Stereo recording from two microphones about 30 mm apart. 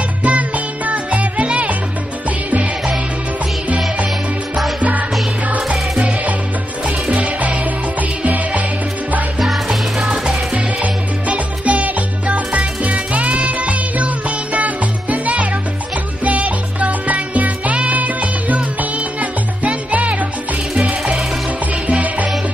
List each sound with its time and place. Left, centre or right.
0.2 s music: right
7.2 s music: right
9.4 s music: centre
10.8 s music: right
12.5 s music: right
13.3 s music: right
20.7 s music: centre